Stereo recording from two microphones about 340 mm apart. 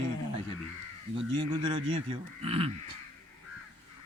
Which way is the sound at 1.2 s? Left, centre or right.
Right.